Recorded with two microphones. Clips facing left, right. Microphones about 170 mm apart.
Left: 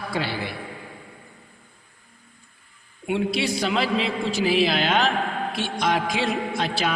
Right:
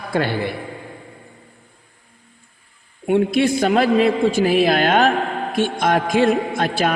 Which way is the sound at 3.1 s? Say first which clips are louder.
Right 8 dB; 50° right (ahead or behind).